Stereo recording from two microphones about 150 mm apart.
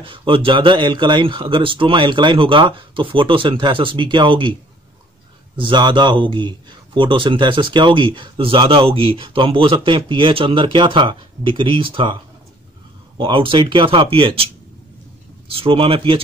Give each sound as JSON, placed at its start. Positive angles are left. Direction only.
{"t": 0.0, "sound": "speech", "side_deg": -35}
{"t": 5.6, "sound": "speech", "side_deg": -30}
{"t": 13.2, "sound": "speech", "side_deg": -35}